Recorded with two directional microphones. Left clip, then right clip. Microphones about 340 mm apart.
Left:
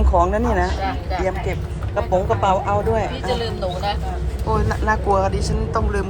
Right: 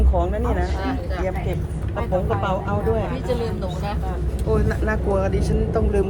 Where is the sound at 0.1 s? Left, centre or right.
Left.